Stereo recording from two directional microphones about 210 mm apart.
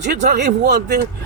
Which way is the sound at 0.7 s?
50° right (ahead or behind).